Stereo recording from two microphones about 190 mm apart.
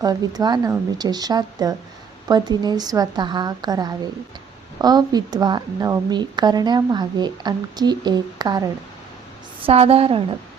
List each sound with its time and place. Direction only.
0.0 s a woman's voice: 20° right (ahead or behind)